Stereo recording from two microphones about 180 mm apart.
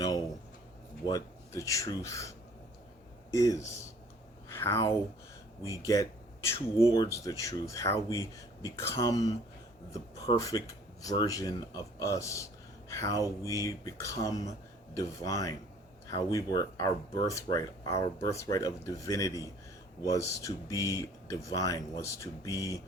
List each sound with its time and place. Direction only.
1.0 s speech: 20° left (ahead or behind)
3.3 s speech: 20° left (ahead or behind)
4.4 s a sound: 15° left (ahead or behind)
5.8 s speech: 15° left (ahead or behind)